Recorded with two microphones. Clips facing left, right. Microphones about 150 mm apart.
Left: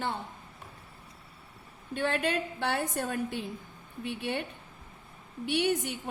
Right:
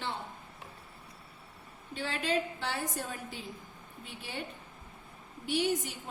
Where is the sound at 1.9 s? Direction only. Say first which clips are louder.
Left 3 dB; 55° left (ahead or behind).